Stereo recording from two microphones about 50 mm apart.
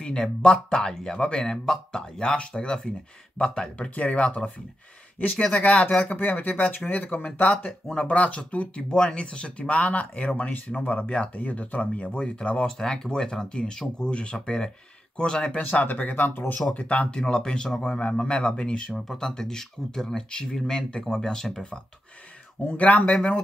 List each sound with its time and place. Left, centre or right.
0.0 s speech: centre
5.6 s speech: left
5.9 s speech: centre
6.1 s speech: left
7.6 s speech: centre
15.5 s speech: left
16.7 s speech: left
18.9 s speech: centre
22.7 s speech: left
23.1 s speech: centre